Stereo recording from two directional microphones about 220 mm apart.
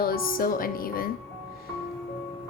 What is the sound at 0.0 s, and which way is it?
A woman's voice, 40° left (ahead or behind).